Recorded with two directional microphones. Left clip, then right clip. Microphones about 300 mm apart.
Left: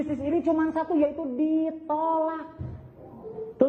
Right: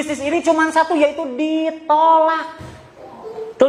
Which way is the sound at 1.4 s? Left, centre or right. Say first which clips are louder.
Right 4 dB; right.